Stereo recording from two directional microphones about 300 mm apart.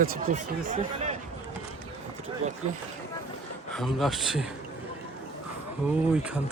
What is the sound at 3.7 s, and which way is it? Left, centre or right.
Speech, centre.